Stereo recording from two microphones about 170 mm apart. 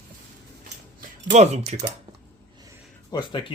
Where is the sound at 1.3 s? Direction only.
40° right (ahead or behind).